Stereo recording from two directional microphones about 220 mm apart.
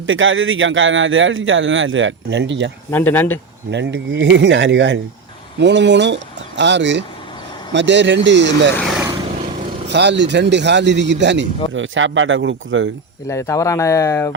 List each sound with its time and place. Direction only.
0.1 s speech: 60° right (ahead or behind)
2.9 s speech: 10° left (ahead or behind)
3.7 s a man's voice: 50° right (ahead or behind)
9.3 s vehicle: 30° right (ahead or behind)
9.9 s a man's voice: 50° right (ahead or behind)
13.2 s speech: 10° left (ahead or behind)